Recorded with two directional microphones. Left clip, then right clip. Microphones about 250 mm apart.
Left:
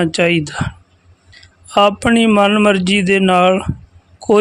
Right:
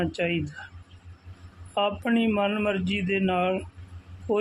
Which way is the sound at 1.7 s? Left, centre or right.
Left.